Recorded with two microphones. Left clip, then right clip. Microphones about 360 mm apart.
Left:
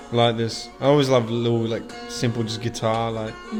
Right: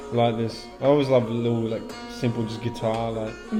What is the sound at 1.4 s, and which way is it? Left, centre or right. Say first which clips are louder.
Speech: left 3 dB; left.